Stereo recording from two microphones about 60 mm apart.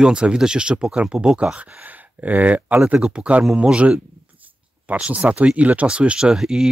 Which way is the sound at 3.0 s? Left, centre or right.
Centre.